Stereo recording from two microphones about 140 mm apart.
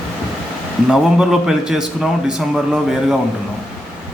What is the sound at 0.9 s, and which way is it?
A man's voice, 5° right (ahead or behind).